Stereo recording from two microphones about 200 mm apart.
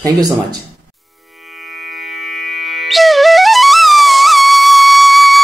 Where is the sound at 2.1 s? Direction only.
Centre (ahead or behind).